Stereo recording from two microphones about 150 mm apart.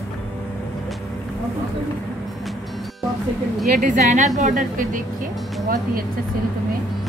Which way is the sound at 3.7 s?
60° right (ahead or behind).